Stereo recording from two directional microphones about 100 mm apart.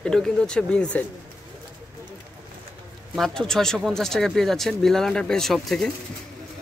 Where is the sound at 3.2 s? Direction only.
5° left (ahead or behind).